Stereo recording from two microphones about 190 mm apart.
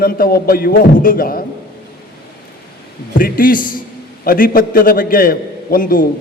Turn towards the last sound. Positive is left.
turn(degrees=50)  # may be behind; listen again after turning